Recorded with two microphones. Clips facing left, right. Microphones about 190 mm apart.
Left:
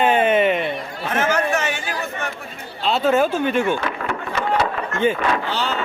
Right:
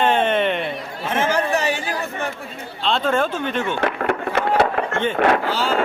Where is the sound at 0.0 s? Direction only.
10° left (ahead or behind).